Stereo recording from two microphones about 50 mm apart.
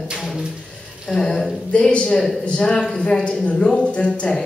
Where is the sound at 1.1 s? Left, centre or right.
Centre.